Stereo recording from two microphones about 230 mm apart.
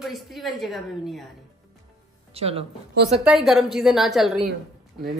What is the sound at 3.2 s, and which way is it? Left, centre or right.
A woman's voice, centre.